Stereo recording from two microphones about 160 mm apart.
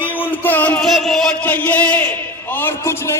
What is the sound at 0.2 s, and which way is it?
Music, 10° left (ahead or behind).